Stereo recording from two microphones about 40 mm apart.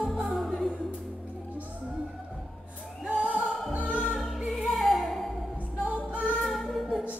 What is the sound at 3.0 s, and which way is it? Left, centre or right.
Music, right.